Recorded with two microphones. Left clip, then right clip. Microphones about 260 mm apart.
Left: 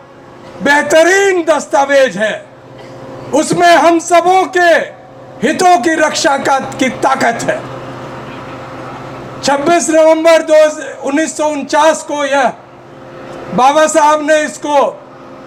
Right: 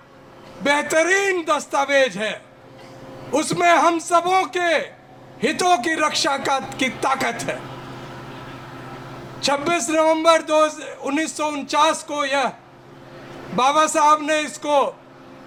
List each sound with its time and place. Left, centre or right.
0.6 s a man's voice: right
9.4 s a man's voice: right
13.6 s a man's voice: right